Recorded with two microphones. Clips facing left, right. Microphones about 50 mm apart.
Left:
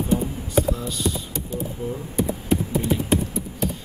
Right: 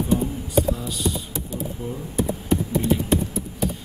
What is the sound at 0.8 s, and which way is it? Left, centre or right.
Speech, centre.